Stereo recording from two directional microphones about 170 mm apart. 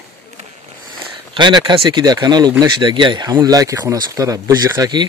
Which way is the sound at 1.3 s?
25° right (ahead or behind).